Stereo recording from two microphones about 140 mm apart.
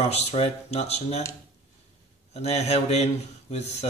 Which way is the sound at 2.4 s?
50° left (ahead or behind).